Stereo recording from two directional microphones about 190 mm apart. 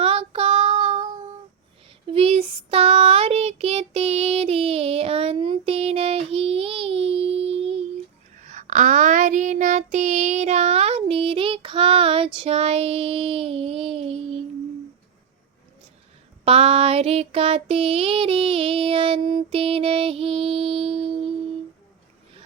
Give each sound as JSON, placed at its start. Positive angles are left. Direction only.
{"t": 0.0, "sound": "child singing", "side_deg": -30}
{"t": 2.0, "sound": "child singing", "side_deg": -30}
{"t": 16.4, "sound": "a sound", "side_deg": -30}